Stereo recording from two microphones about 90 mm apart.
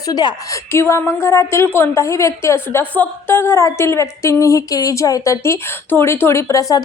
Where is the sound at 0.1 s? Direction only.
50° left (ahead or behind).